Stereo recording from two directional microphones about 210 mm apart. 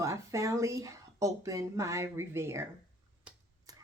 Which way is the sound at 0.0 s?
15° right (ahead or behind).